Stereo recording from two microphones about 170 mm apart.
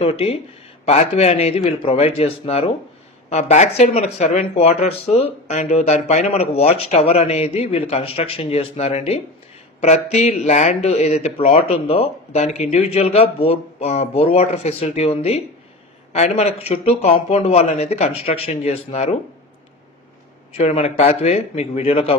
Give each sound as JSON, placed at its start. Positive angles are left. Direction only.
{"t": 0.0, "sound": "speech", "side_deg": 35}
{"t": 20.5, "sound": "speech", "side_deg": 35}